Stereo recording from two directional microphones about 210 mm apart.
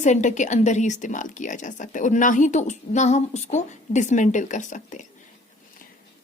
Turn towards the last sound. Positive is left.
turn(degrees=35)  # may be behind; listen again after turning